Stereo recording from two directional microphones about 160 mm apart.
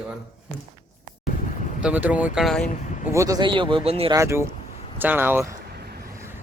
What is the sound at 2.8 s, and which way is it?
Speech, 50° left (ahead or behind).